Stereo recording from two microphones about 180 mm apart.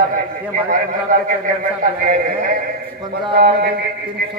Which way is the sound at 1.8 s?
50° right (ahead or behind).